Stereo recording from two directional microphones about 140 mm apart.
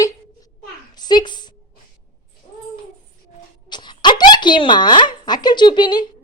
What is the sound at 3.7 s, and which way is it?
Speech, 35° left (ahead or behind).